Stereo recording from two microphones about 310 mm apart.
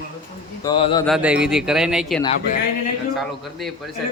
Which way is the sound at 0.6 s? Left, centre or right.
Centre.